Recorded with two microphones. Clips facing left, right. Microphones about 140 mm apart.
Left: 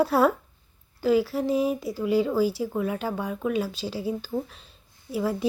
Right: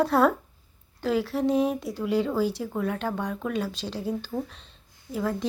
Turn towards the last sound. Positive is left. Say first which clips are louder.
# left 2 dB
turn(degrees=5)  # may be behind; listen again after turning